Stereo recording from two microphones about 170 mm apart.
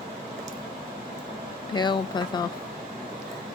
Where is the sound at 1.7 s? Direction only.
25° left (ahead or behind).